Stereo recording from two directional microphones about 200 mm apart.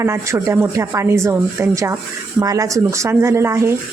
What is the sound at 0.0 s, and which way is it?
Speech, 15° right (ahead or behind).